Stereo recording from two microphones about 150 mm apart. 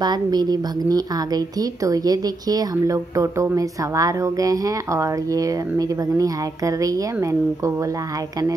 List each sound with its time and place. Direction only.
0.0 s a woman's voice: 25° right (ahead or behind)